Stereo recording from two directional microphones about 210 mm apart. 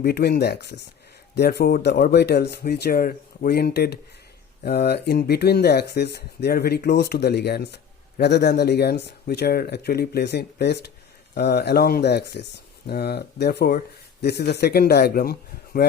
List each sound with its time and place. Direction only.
0.0 s speech: 50° left (ahead or behind)